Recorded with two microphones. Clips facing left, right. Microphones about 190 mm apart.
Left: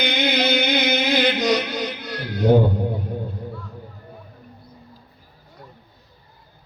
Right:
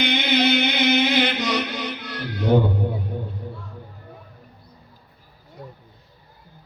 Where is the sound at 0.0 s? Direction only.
40° left (ahead or behind).